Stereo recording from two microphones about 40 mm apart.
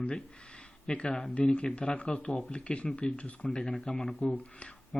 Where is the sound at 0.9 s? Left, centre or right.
Left.